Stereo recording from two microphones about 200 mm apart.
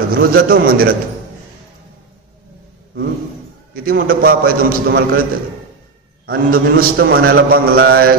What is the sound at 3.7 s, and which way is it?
A man's voice, 50° right (ahead or behind).